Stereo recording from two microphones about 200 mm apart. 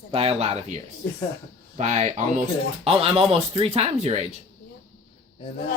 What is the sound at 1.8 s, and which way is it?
Speech, 35° right (ahead or behind).